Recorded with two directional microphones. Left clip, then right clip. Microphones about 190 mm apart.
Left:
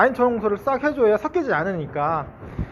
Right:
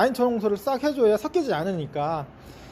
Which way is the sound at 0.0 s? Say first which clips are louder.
Left 4 dB; 50° right (ahead or behind).